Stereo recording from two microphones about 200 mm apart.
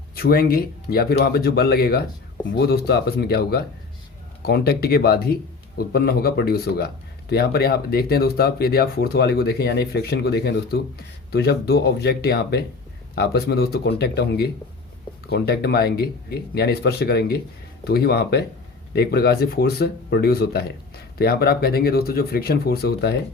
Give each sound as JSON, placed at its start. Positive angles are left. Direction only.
{"t": 0.2, "sound": "speech", "side_deg": 50}